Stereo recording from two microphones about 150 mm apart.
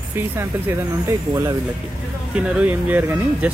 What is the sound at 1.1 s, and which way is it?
Speech, 25° right (ahead or behind).